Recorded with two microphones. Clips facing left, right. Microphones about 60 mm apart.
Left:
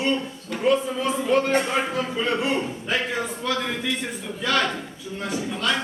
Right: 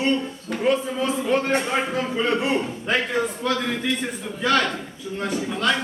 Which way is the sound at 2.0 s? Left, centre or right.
Centre.